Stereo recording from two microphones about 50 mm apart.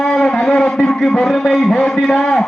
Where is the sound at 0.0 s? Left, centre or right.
Centre.